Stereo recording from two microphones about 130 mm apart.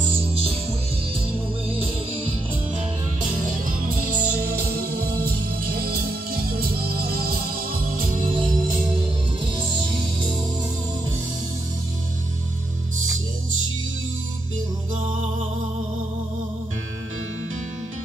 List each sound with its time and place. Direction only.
0.0 s music: 45° right (ahead or behind)
1.7 s music: 45° right (ahead or behind)
3.2 s music: 90° right
8.2 s music: 40° right (ahead or behind)